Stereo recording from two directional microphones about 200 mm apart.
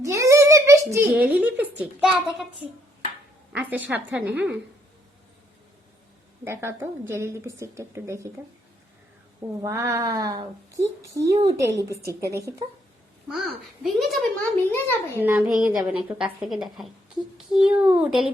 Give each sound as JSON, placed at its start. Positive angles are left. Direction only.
{"t": 0.0, "sound": "a sound", "side_deg": -15}
{"t": 1.1, "sound": "a woman's voice", "side_deg": -10}
{"t": 3.5, "sound": "a woman's voice", "side_deg": -10}
{"t": 6.4, "sound": "a woman's voice", "side_deg": -15}
{"t": 9.6, "sound": "a woman's voice", "side_deg": -15}
{"t": 13.2, "sound": "a woman's voice", "side_deg": 0}
{"t": 14.7, "sound": "a child's voice", "side_deg": 10}
{"t": 15.2, "sound": "a woman's voice", "side_deg": -10}